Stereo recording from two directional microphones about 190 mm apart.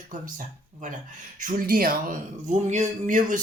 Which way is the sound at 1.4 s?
50° right (ahead or behind).